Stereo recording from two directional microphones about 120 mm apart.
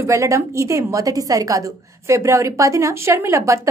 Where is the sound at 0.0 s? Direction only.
25° right (ahead or behind).